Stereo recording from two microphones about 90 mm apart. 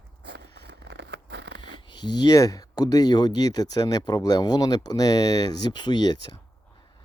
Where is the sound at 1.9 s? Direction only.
55° left (ahead or behind).